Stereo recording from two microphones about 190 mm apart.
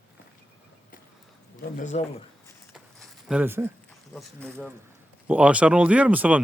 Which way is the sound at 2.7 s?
5° right (ahead or behind).